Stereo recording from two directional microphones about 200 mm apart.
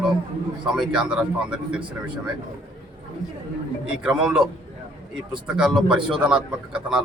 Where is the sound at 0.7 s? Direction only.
5° right (ahead or behind).